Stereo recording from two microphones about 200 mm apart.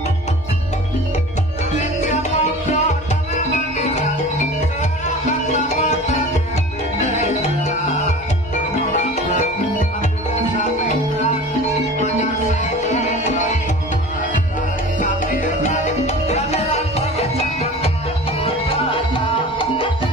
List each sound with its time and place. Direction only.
1.8 s music: 35° left (ahead or behind)
5.3 s music: 35° left (ahead or behind)
12.8 s music: 35° left (ahead or behind)
15.0 s music: 40° left (ahead or behind)